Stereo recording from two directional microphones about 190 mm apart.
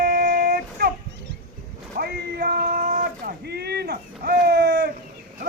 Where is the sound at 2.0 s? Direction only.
55° right (ahead or behind).